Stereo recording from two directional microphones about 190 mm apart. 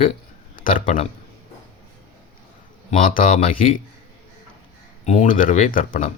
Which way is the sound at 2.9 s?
45° left (ahead or behind).